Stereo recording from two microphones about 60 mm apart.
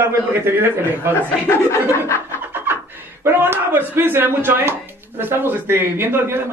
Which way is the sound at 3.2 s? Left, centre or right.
Right.